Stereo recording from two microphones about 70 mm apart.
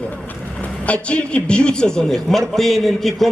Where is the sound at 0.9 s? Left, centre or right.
Centre.